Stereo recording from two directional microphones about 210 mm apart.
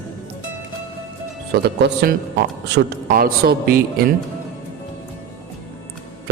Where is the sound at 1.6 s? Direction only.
50° right (ahead or behind).